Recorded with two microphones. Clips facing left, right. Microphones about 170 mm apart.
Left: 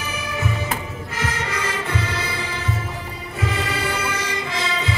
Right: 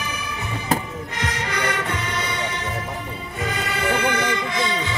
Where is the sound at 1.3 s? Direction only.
30° left (ahead or behind).